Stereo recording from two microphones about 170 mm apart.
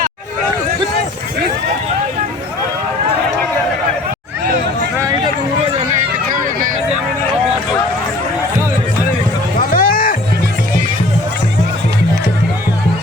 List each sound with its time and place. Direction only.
9.6 s music: 55° left (ahead or behind)